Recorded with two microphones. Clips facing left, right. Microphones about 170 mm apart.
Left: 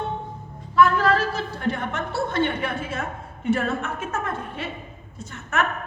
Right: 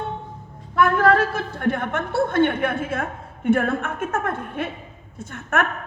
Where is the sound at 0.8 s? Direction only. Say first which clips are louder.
Right 1 dB; 55° right (ahead or behind).